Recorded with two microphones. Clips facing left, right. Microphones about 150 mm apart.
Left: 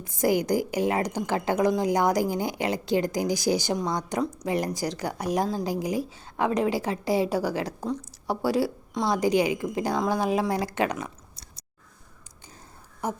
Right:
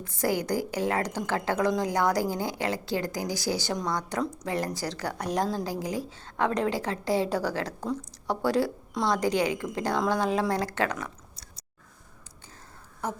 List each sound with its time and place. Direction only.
0.0 s a woman's voice: 15° left (ahead or behind)
13.0 s a woman's voice: 10° left (ahead or behind)